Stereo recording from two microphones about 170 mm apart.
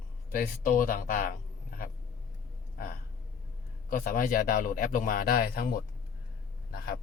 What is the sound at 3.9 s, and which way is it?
Speech, 55° left (ahead or behind).